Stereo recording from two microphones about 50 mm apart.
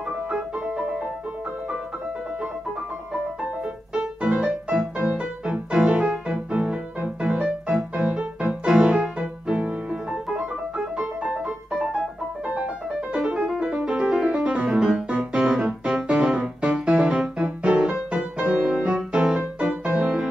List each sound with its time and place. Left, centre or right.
0.7 s music: right
3.9 s music: right
9.6 s music: right
11.7 s music: centre